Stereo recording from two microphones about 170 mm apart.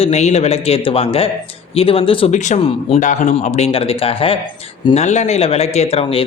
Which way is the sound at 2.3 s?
45° left (ahead or behind).